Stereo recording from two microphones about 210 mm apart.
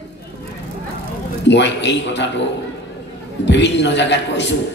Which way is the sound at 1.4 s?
55° left (ahead or behind).